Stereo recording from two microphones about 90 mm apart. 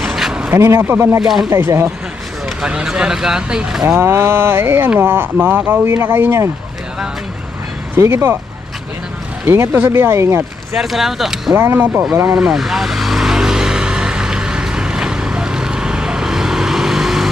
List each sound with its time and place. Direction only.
0.0 s a sound: 5° right (ahead or behind)
0.5 s speech: 30° right (ahead or behind)
1.2 s speech: 5° right (ahead or behind)
2.6 s speech: 10° right (ahead or behind)
3.8 s speech: 20° right (ahead or behind)
7.9 s speech: 30° right (ahead or behind)
9.5 s speech: 20° right (ahead or behind)
10.8 s speech: 5° right (ahead or behind)
11.5 s speech: 25° right (ahead or behind)
12.3 s vehicle: 5° right (ahead or behind)